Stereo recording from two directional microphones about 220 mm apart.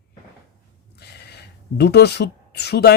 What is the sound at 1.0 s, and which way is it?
Speech, 50° left (ahead or behind).